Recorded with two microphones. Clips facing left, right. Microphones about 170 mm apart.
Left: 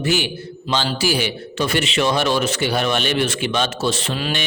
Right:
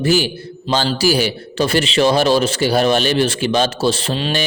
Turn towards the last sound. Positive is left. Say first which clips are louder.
# right 3 dB
turn(degrees=-30)  # may be behind; listen again after turning